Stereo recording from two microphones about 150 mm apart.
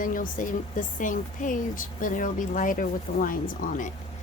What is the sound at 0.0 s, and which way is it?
Speech, 65° left (ahead or behind).